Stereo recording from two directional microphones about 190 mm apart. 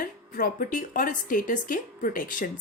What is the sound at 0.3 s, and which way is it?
Speech, 50° left (ahead or behind).